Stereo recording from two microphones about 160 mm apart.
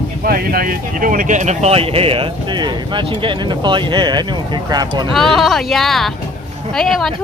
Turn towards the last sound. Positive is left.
turn(degrees=0)  # may be behind; listen again after turning